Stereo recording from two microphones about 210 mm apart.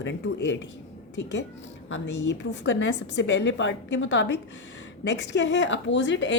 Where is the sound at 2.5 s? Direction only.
60° left (ahead or behind).